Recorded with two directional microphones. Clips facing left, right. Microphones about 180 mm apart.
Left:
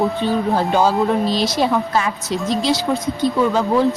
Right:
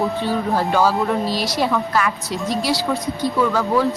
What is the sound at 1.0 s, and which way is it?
Speech, 20° left (ahead or behind).